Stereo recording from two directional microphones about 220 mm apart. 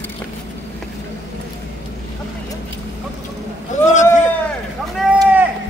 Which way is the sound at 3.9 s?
35° left (ahead or behind).